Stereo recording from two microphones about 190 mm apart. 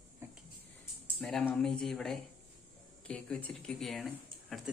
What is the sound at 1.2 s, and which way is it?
Speech, centre (ahead or behind).